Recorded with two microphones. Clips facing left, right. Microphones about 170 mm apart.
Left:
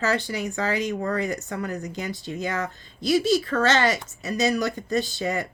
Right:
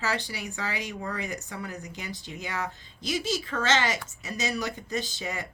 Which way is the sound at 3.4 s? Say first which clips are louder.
Left 5 dB; 55° left (ahead or behind).